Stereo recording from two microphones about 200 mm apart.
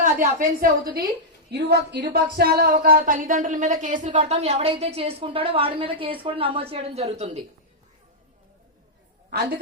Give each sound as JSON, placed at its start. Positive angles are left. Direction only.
{"t": 0.0, "sound": "a woman's voice", "side_deg": -40}
{"t": 1.5, "sound": "speech", "side_deg": -55}